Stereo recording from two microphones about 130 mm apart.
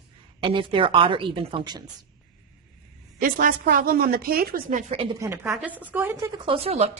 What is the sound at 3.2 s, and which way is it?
A woman's voice, 90° right.